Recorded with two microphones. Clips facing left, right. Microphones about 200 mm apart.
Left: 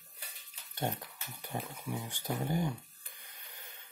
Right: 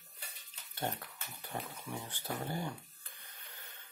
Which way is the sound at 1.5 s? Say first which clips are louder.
Left 3 dB; 10° left (ahead or behind).